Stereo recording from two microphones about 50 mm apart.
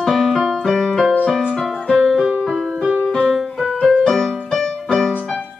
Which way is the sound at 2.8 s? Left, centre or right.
Left.